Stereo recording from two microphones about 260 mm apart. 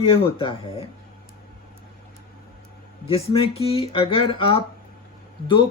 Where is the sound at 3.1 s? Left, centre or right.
Left.